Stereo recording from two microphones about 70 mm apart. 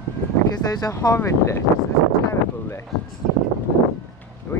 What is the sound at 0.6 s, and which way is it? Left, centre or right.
Speech, left.